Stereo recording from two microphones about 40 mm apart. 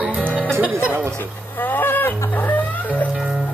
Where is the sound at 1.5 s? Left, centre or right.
Left.